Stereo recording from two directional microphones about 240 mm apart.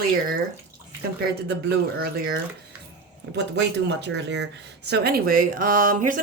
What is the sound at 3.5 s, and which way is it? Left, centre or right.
Speech, right.